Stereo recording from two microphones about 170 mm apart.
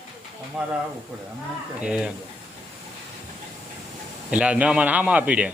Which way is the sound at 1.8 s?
5° right (ahead or behind).